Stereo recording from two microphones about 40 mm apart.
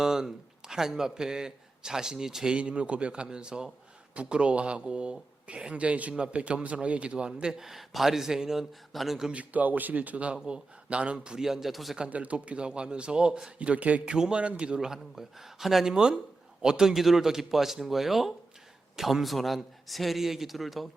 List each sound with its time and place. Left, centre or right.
0.0 s a man's voice: centre
2.6 s a man's voice: right
7.6 s a man's voice: centre
8.9 s speech: centre
9.3 s speech: right
10.3 s a man's voice: right
11.3 s a man's voice: centre
12.0 s a man's voice: right
14.1 s a man's voice: right
14.8 s a man's voice: centre